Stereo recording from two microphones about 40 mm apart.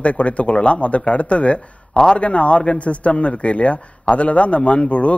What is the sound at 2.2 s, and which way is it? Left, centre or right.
A man's voice, left.